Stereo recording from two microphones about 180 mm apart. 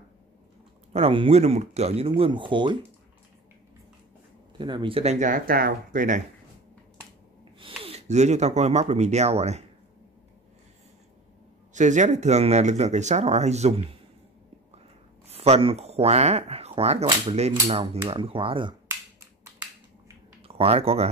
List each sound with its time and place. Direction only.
0.9 s speech: 30° right (ahead or behind)
4.6 s speech: 25° right (ahead or behind); by 6.2 s 45° right (ahead or behind)
7.5 s speech: 30° right (ahead or behind)
11.7 s speech: 40° right (ahead or behind)
15.2 s speech: 35° right (ahead or behind)
20.4 s speech: 30° right (ahead or behind)